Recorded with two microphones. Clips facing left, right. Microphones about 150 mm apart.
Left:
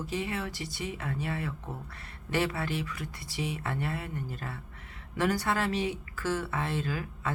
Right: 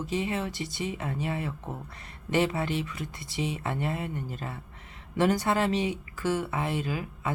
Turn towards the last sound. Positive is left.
turn(degrees=-15)  # may be behind; listen again after turning